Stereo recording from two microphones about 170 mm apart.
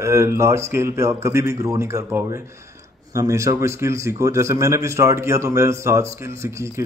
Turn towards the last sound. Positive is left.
turn(degrees=-15)  # may be behind; listen again after turning